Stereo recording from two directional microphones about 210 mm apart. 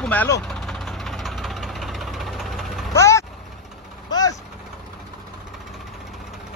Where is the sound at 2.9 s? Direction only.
15° left (ahead or behind).